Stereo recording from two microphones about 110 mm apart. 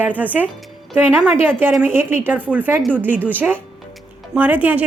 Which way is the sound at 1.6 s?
20° right (ahead or behind).